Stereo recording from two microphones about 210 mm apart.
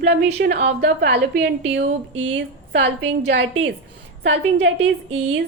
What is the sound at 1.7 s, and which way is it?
A woman's voice, 65° right (ahead or behind).